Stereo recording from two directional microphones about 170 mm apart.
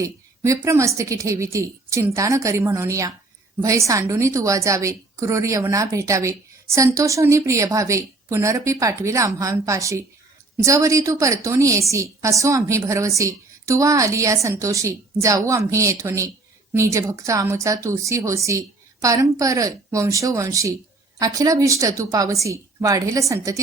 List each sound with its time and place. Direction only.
0.0 s a woman's voice: 20° right (ahead or behind)